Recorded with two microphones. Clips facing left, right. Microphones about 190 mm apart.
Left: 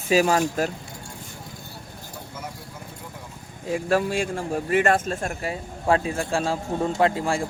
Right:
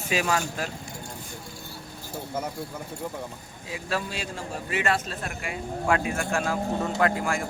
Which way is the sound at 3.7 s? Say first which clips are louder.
Left 9 dB; 50° left (ahead or behind).